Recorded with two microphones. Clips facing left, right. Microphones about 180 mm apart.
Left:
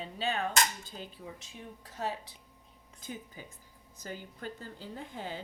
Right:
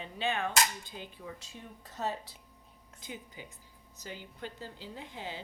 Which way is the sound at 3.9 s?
45° left (ahead or behind).